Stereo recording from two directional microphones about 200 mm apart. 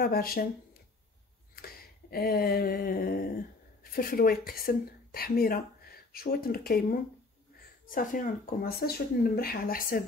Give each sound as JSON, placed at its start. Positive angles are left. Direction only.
{"t": 0.0, "sound": "speech", "side_deg": 50}
{"t": 1.5, "sound": "a sound", "side_deg": 50}
{"t": 3.8, "sound": "a woman's voice", "side_deg": 45}